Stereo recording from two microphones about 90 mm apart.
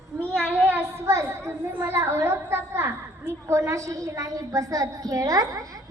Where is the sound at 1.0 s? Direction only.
30° right (ahead or behind).